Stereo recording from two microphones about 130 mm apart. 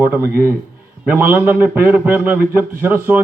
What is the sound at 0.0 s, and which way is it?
A man's voice, 15° right (ahead or behind).